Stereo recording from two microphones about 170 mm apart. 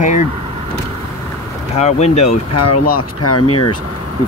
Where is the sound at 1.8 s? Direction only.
40° left (ahead or behind).